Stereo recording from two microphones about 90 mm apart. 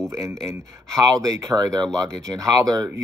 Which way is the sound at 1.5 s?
50° right (ahead or behind).